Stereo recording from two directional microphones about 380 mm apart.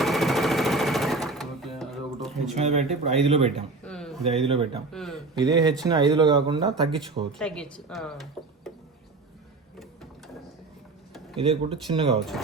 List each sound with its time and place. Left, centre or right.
0.0 s sewing machine: centre
2.6 s speech: centre
3.8 s a sound: centre
4.2 s speech: centre
4.9 s speech: centre
5.4 s speech: centre
7.3 s a woman's voice: centre
11.3 s speech: centre